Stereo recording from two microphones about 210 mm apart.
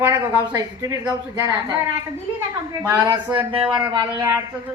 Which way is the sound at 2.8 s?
10° right (ahead or behind).